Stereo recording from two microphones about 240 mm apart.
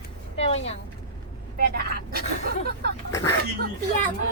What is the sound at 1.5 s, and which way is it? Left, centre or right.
Speech, right.